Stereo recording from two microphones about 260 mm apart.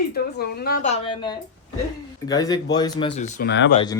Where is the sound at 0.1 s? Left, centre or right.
Left.